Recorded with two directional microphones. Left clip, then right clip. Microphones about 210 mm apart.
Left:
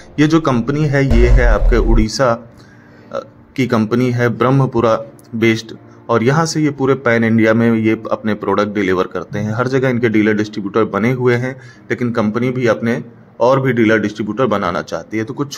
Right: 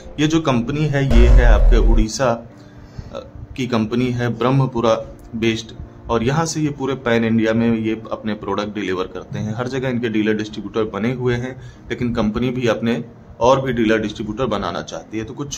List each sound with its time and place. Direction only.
0.1 s speech: 20° left (ahead or behind)
1.0 s speech: centre (ahead or behind)
1.4 s speech: 20° left (ahead or behind)